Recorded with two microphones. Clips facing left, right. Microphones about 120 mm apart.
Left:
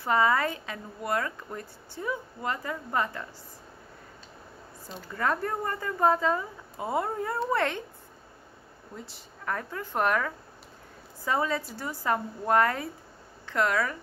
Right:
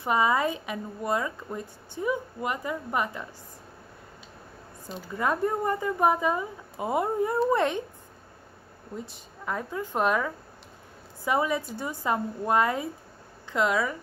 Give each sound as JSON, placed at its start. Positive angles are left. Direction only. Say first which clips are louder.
{"t": 0.0, "sound": "a woman's voice", "louder": "even", "side_deg": -20}
{"t": 5.0, "sound": "a woman's voice", "louder": "right 2 dB", "side_deg": -15}
{"t": 8.9, "sound": "a woman's voice", "louder": "right 5 dB", "side_deg": -15}